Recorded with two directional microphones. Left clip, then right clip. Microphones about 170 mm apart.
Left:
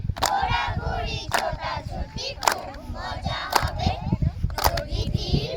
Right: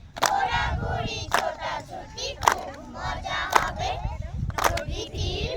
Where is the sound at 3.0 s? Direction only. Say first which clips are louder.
Right 2 dB; 15° left (ahead or behind).